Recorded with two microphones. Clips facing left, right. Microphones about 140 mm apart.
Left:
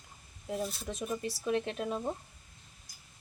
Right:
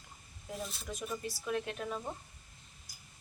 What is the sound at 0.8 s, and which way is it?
Speech, 30° left (ahead or behind).